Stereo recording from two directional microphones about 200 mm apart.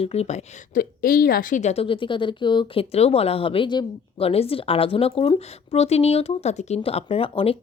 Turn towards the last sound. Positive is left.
turn(degrees=25)  # may be behind; listen again after turning